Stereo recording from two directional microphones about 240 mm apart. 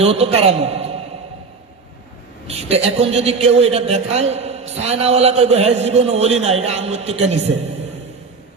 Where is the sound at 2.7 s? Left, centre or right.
Right.